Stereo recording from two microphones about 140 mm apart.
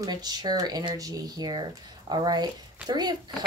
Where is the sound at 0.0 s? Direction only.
30° right (ahead or behind).